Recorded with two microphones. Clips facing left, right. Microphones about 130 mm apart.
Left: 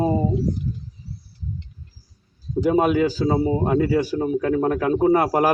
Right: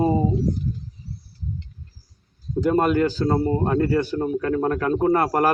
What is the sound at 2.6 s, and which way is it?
A man's voice, 5° left (ahead or behind).